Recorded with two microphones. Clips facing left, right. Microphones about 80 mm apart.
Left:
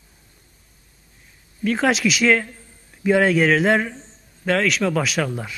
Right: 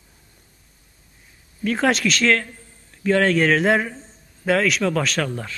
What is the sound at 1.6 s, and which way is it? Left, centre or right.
A man's voice, centre.